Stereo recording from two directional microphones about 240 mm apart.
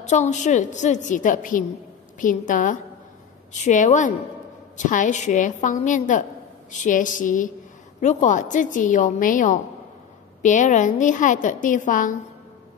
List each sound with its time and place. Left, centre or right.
0.0 s a woman's voice: left